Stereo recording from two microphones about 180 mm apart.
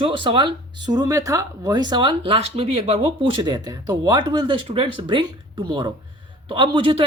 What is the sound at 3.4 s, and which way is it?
A woman's voice, 20° right (ahead or behind).